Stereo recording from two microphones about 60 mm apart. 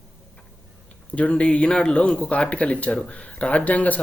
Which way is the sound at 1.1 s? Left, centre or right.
Left.